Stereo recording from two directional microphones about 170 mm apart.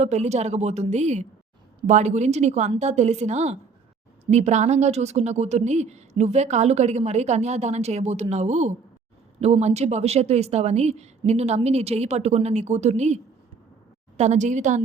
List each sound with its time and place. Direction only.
0.0 s speech: 40° right (ahead or behind)
14.2 s a woman's voice: 45° right (ahead or behind)